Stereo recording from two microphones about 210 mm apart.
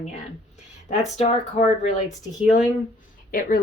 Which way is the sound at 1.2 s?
30° left (ahead or behind).